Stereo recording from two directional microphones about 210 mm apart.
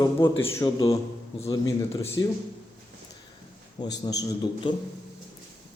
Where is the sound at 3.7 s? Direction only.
20° left (ahead or behind).